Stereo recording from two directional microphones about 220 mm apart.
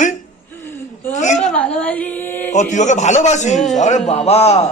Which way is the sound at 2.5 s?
35° left (ahead or behind).